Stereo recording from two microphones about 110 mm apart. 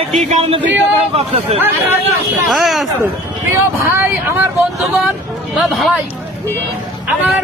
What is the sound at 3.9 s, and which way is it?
Speech, 20° right (ahead or behind).